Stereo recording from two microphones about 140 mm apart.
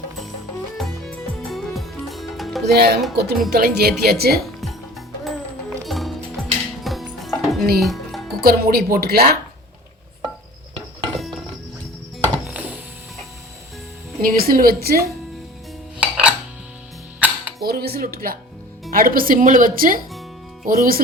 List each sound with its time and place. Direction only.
0.8 s music: centre (ahead or behind)
3.6 s speech: 90° right
4.6 s music: centre (ahead or behind)
8.4 s speech: 90° right
11.2 s a sound: centre (ahead or behind)
14.2 s speech: 90° right
16.0 s dishes: 10° right (ahead or behind)
17.2 s music: 10° right (ahead or behind)
17.6 s speech: 90° right